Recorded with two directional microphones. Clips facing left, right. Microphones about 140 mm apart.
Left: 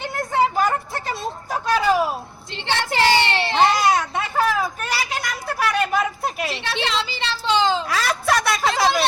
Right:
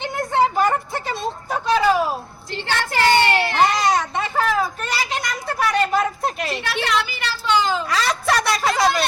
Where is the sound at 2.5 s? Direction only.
25° left (ahead or behind).